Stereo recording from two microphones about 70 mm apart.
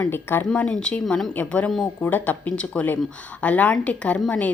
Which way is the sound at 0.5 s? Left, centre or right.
Centre.